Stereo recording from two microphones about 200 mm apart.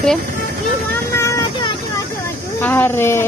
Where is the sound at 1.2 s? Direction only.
20° left (ahead or behind).